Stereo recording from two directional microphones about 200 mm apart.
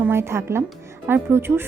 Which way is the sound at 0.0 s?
10° right (ahead or behind).